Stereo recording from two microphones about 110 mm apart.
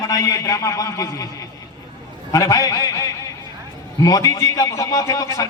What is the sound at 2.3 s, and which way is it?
A man's voice, 30° left (ahead or behind).